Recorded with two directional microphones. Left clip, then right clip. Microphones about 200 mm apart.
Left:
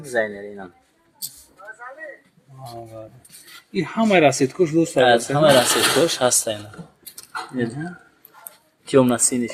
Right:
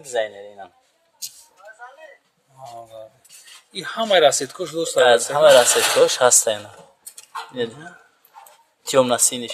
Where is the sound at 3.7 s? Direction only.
15° right (ahead or behind).